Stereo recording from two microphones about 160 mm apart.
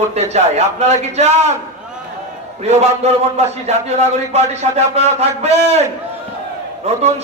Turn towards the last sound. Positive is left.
turn(degrees=-45)  # may be behind; listen again after turning